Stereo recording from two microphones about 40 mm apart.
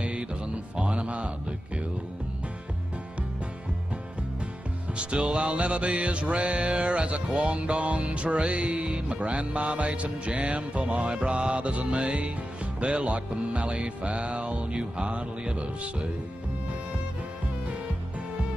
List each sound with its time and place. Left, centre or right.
0.0 s music: right
4.9 s music: right
7.3 s music: right